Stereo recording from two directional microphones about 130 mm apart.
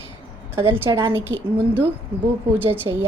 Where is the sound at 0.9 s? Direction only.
25° right (ahead or behind).